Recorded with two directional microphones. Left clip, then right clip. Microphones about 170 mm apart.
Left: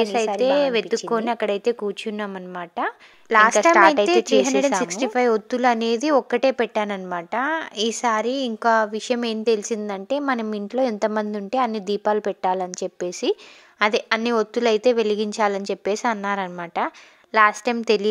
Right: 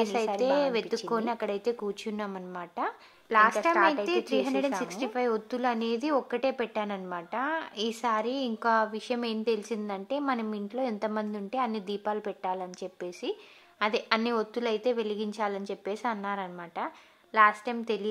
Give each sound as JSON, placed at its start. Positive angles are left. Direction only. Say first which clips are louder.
{"t": 0.0, "sound": "a woman's voice", "louder": "left 7 dB", "side_deg": 30}